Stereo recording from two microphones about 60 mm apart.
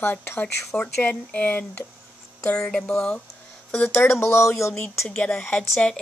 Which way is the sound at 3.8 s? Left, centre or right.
Left.